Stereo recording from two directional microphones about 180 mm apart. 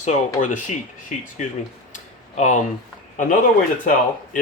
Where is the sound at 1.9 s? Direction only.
40° left (ahead or behind).